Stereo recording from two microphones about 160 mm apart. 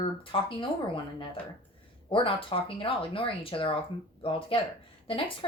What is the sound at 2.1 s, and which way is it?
Speech, 35° left (ahead or behind).